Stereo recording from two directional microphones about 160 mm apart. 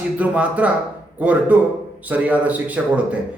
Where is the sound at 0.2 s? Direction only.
10° right (ahead or behind).